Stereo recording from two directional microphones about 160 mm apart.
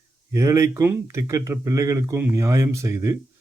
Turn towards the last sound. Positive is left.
turn(degrees=-20)  # may be behind; listen again after turning